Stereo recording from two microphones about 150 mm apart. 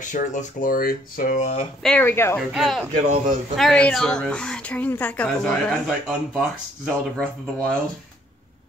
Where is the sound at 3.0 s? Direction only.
55° right (ahead or behind).